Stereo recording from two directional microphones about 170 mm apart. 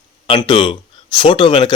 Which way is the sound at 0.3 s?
30° left (ahead or behind).